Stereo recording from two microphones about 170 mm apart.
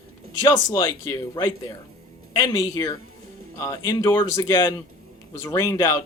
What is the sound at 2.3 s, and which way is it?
Speech, 20° left (ahead or behind).